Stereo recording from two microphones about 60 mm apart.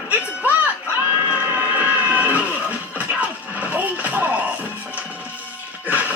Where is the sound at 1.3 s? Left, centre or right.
Right.